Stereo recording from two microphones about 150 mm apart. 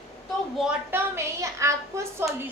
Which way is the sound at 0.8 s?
15° right (ahead or behind).